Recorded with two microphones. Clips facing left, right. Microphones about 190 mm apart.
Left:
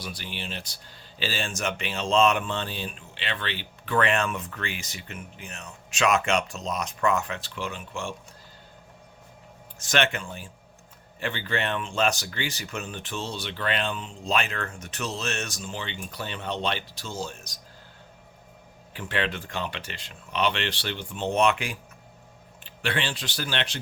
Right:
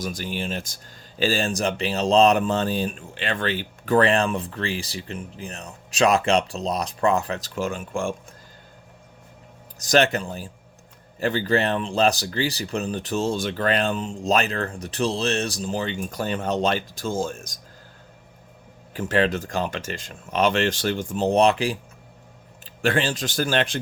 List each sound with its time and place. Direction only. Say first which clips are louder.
0.0 s speech: right 8 dB; 45° right (ahead or behind)
9.7 s speech: right 6 dB; 40° right (ahead or behind)
18.9 s speech: right 8 dB; 40° right (ahead or behind)